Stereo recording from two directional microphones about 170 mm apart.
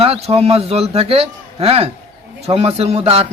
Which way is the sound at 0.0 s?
35° right (ahead or behind).